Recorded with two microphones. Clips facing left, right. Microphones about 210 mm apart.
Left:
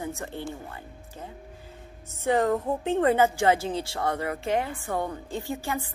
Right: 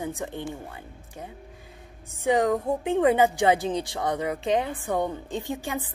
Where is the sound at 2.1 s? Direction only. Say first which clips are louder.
Right 1 dB; 15° right (ahead or behind).